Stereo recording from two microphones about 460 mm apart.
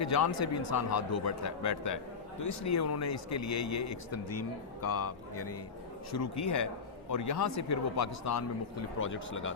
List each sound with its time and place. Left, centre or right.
0.0 s speech: left
6.4 s speech: left